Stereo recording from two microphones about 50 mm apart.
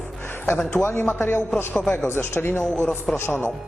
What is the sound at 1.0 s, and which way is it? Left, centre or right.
Speech, left.